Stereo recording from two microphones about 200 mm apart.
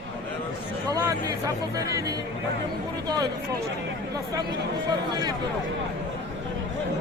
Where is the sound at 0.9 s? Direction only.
20° right (ahead or behind).